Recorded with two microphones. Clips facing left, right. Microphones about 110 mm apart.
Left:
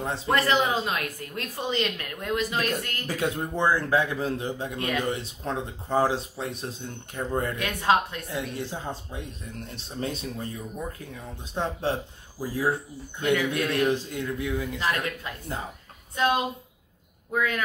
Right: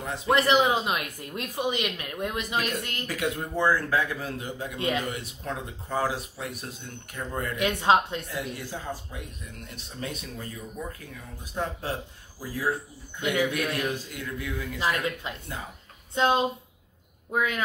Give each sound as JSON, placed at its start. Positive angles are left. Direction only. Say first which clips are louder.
{"t": 0.3, "sound": "speech", "louder": "right 2 dB", "side_deg": -20}
{"t": 3.1, "sound": "speech", "louder": "left 2 dB", "side_deg": 30}
{"t": 3.5, "sound": "speech", "louder": "left 1 dB", "side_deg": 20}
{"t": 4.7, "sound": "speech", "louder": "right 3 dB", "side_deg": -20}
{"t": 5.0, "sound": "speech", "louder": "left 4 dB", "side_deg": 30}
{"t": 7.5, "sound": "speech", "louder": "right 3 dB", "side_deg": -20}
{"t": 8.3, "sound": "speech", "louder": "left 2 dB", "side_deg": 25}
{"t": 13.2, "sound": "speech", "louder": "left 2 dB", "side_deg": -15}
{"t": 13.5, "sound": "speech", "louder": "left 4 dB", "side_deg": 25}
{"t": 14.8, "sound": "speech", "louder": "even", "side_deg": -20}